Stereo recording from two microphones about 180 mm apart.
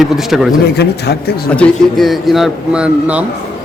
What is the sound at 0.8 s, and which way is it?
Speech, 65° left (ahead or behind).